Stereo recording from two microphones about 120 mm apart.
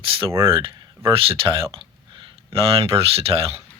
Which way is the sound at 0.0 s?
50° right (ahead or behind).